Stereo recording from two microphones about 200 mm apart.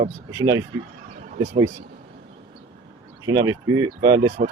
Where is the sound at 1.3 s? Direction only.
35° right (ahead or behind).